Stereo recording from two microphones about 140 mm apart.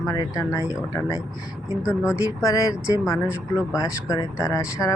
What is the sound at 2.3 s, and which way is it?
Speech, 25° left (ahead or behind).